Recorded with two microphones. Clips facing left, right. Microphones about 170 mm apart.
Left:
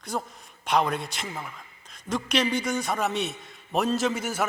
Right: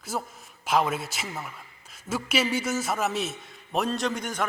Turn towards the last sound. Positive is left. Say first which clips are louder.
# left 2 dB
turn(degrees=5)  # may be behind; listen again after turning